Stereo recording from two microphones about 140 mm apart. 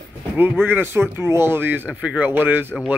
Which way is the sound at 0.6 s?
15° right (ahead or behind).